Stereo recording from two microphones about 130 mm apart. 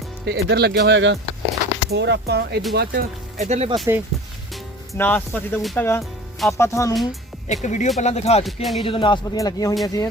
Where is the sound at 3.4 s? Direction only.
60° right (ahead or behind).